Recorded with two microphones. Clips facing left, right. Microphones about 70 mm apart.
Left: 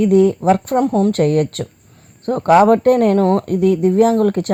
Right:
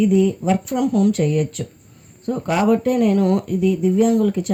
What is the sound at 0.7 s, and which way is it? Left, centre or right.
Speech, left.